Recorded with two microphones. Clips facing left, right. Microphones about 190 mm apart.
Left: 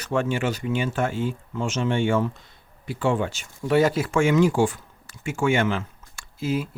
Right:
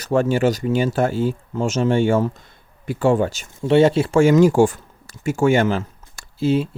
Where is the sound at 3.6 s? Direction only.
25° right (ahead or behind).